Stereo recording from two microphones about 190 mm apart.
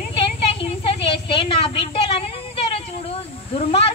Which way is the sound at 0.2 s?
30° left (ahead or behind).